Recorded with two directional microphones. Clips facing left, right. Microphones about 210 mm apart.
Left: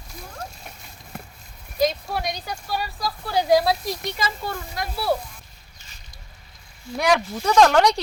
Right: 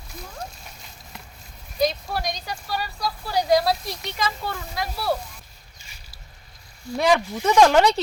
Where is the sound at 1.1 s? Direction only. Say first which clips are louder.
Left 7 dB; 55° left (ahead or behind).